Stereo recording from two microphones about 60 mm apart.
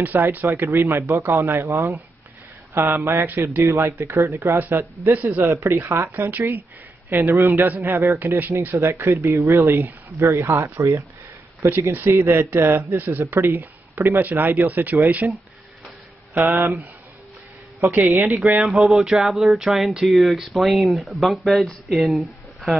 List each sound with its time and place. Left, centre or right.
0.0 s speech: right
0.5 s speech: right
2.7 s speech: right
3.6 s speech: right
5.1 s a man's voice: right
5.4 s speech: right
6.1 s speech: right
11.6 s speech: right
12.9 s speech: right
15.2 s speech: centre
16.3 s speech: right
18.1 s speech: right
18.6 s speech: centre